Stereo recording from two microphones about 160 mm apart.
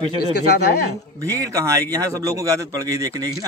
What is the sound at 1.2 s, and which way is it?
Speech, 20° right (ahead or behind).